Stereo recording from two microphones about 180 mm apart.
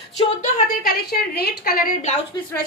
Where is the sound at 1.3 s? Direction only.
60° left (ahead or behind).